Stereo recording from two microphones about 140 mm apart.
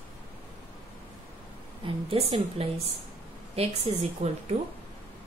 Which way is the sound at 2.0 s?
40° right (ahead or behind).